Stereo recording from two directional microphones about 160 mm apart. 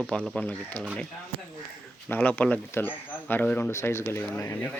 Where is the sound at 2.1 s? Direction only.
10° left (ahead or behind).